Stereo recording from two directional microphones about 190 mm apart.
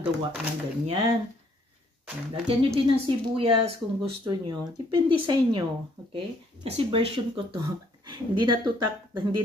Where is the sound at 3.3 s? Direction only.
30° right (ahead or behind).